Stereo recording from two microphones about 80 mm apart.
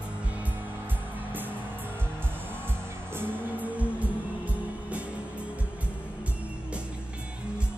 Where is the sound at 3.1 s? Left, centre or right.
Right.